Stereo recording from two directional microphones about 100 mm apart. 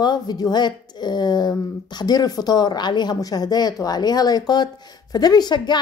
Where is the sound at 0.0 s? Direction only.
45° left (ahead or behind).